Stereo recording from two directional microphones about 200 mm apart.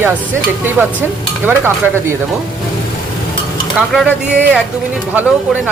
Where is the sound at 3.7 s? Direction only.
Centre (ahead or behind).